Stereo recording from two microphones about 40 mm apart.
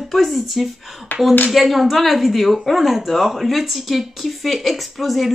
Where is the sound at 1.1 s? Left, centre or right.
Left.